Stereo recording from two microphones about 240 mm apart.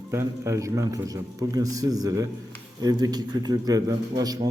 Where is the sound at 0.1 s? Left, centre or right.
Centre.